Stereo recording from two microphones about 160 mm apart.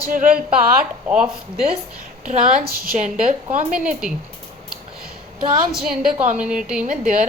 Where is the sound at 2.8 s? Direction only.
60° right (ahead or behind).